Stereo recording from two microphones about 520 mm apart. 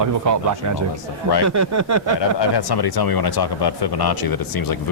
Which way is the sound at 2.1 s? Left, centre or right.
Left.